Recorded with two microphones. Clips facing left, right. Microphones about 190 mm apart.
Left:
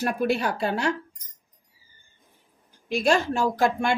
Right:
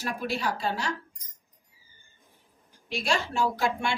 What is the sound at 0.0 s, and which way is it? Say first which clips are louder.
Speech: left 6 dB; 60° left (ahead or behind).